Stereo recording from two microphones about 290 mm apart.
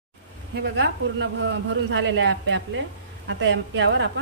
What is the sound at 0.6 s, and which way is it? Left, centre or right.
Speech, right.